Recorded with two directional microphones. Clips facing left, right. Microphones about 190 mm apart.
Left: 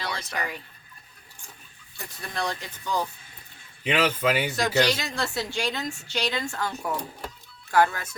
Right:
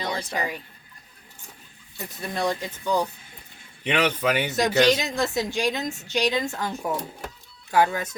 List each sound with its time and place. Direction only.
0.3 s speech: 20° right (ahead or behind)
2.0 s speech: 20° right (ahead or behind)
3.8 s speech: 5° left (ahead or behind)
4.5 s speech: 20° right (ahead or behind)